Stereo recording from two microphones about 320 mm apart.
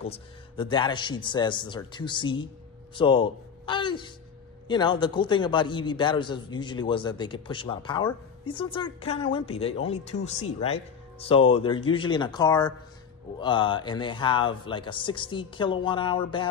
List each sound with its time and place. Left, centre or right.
0.0 s a man's voice: centre